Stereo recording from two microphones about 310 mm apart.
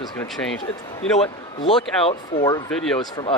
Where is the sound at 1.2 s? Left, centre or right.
Centre.